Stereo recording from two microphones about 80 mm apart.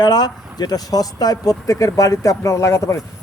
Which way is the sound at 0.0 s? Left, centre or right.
Left.